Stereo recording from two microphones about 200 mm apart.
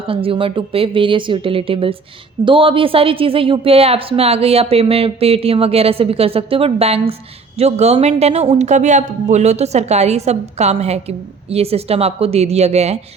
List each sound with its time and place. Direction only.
0.1 s a woman's voice: 25° right (ahead or behind)